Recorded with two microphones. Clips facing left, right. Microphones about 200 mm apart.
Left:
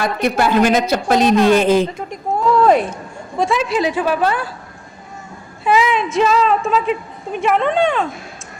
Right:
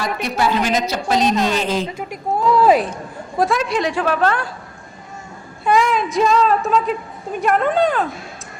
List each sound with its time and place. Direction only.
0.0 s a woman's voice: 55° left (ahead or behind)
2.0 s speech: centre (ahead or behind)
5.6 s speech: 5° left (ahead or behind)